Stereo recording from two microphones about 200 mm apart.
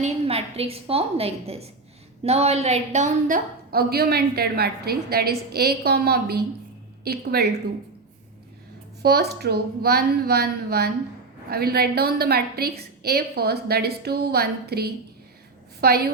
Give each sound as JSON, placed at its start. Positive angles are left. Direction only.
{"t": 0.0, "sound": "a woman's voice", "side_deg": -30}
{"t": 9.0, "sound": "a woman's voice", "side_deg": -55}